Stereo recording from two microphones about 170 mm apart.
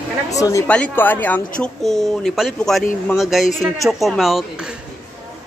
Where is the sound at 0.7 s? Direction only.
10° left (ahead or behind).